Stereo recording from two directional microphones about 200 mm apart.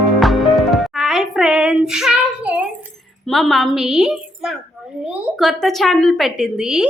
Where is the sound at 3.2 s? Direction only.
Centre (ahead or behind).